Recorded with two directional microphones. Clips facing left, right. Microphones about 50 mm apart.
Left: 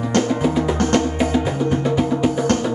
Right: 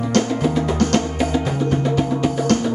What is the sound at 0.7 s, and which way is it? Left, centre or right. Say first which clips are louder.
Music: left 1 dB; left.